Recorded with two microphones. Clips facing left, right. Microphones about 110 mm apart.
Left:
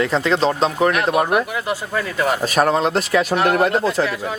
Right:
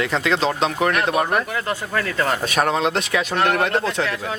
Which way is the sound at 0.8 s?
Centre (ahead or behind).